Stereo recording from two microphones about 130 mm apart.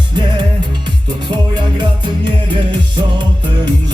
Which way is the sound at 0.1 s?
35° right (ahead or behind).